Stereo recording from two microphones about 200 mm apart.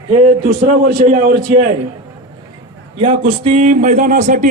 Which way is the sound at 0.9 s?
45° right (ahead or behind).